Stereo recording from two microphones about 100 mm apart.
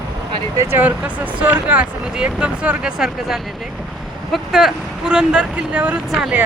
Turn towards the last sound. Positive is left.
turn(degrees=-5)  # may be behind; listen again after turning